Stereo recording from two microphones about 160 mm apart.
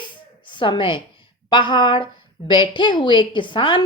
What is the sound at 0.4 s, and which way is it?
A woman's voice, 30° left (ahead or behind).